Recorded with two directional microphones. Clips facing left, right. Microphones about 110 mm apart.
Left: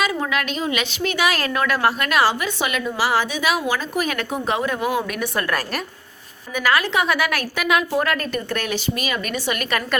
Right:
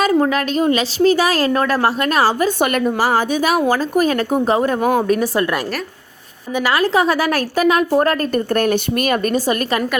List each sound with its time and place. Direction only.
0.0 s a woman's voice: 40° right (ahead or behind)
5.0 s a woman's voice: 35° right (ahead or behind)
6.5 s a woman's voice: 25° right (ahead or behind); by 9.2 s 55° right (ahead or behind)
9.2 s a woman's voice: 35° right (ahead or behind)